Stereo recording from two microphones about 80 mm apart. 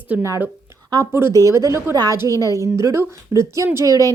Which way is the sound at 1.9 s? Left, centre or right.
Right.